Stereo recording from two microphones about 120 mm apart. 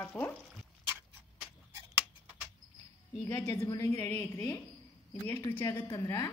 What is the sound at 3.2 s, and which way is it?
A woman's voice, 30° left (ahead or behind).